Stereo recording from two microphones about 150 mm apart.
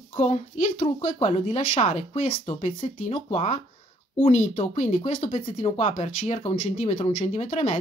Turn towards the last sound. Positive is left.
turn(degrees=50)  # may be behind; listen again after turning